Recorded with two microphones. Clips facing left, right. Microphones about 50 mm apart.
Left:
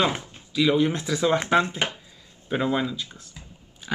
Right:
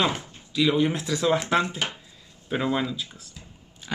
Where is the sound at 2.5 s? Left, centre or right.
Centre.